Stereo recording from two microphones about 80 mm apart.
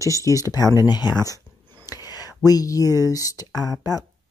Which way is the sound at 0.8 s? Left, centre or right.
Left.